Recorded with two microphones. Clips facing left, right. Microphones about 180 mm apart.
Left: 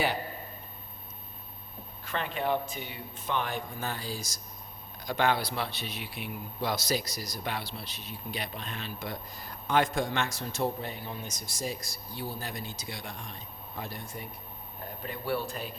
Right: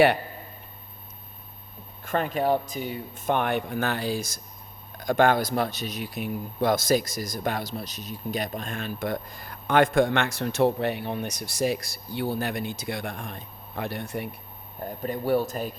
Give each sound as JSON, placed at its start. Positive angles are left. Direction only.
{"t": 2.0, "sound": "speech", "side_deg": -45}
{"t": 15.0, "sound": "speech", "side_deg": -45}